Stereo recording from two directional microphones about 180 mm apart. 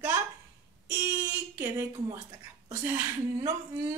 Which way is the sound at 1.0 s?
15° right (ahead or behind).